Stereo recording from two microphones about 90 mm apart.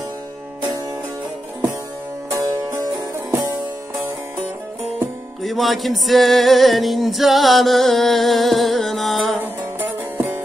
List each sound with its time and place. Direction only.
2.3 s music: 30° right (ahead or behind)
5.4 s music: centre (ahead or behind)
9.8 s music: 30° right (ahead or behind)